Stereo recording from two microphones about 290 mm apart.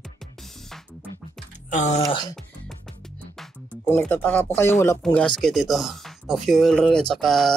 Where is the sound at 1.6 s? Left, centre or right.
Left.